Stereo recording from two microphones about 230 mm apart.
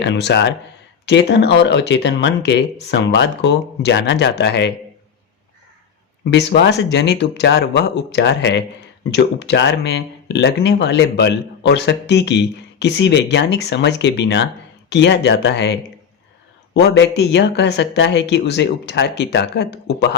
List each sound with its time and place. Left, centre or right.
0.0 s speech: left
6.3 s speech: left
16.7 s speech: left